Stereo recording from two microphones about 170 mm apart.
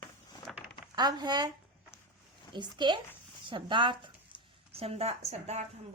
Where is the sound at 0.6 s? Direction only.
5° right (ahead or behind).